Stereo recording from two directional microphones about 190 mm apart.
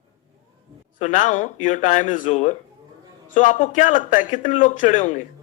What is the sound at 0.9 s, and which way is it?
A man's voice, 40° left (ahead or behind).